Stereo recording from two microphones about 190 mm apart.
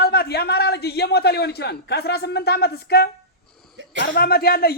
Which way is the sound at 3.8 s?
75° right (ahead or behind).